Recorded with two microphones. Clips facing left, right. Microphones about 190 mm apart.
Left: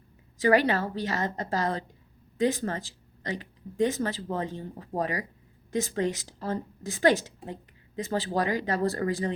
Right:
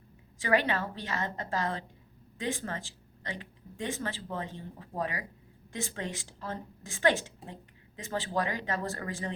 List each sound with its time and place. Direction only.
0.3 s speech: 40° left (ahead or behind)